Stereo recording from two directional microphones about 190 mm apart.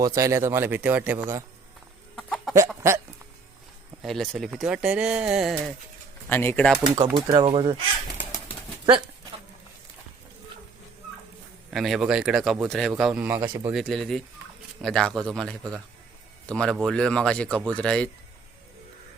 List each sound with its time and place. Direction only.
0.0 s a man's voice: 15° right (ahead or behind)
2.1 s chicken: 5° left (ahead or behind)
4.0 s speech: centre (ahead or behind)
6.2 s speech: 10° left (ahead or behind)
6.9 s speech: 25° right (ahead or behind)
8.2 s bird: 25° left (ahead or behind)
11.7 s a man's voice: centre (ahead or behind)
13.3 s speech: 25° right (ahead or behind)
13.7 s speech: centre (ahead or behind)